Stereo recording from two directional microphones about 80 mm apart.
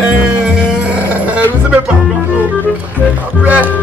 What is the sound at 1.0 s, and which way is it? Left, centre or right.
Music, centre.